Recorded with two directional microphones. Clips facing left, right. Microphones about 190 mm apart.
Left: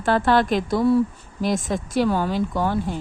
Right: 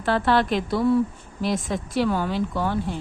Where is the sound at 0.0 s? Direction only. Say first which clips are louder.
Left 2 dB; 45° left (ahead or behind).